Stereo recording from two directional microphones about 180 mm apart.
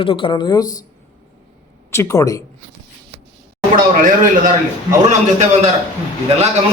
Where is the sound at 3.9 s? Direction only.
50° right (ahead or behind).